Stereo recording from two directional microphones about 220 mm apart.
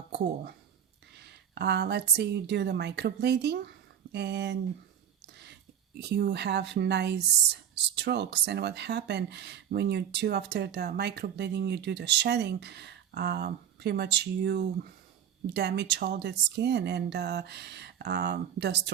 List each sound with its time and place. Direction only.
1.2 s speech: 50° right (ahead or behind)